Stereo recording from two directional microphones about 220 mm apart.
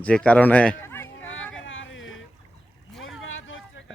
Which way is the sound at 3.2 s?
60° left (ahead or behind).